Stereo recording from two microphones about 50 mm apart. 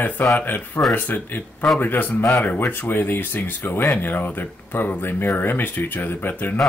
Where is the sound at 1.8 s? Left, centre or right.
Left.